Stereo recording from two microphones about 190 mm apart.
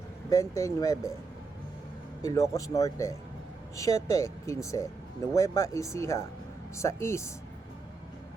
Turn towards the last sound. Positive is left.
turn(degrees=15)  # may be behind; listen again after turning